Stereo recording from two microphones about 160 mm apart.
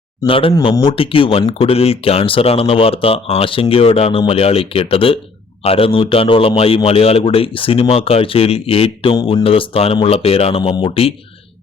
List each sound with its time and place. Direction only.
0.3 s speech: 35° left (ahead or behind)